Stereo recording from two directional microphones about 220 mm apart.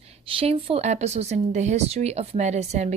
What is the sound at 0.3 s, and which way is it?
Speech, 25° right (ahead or behind).